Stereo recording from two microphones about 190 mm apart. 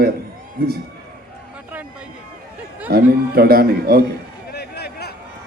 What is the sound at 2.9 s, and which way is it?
A man's voice, 55° right (ahead or behind).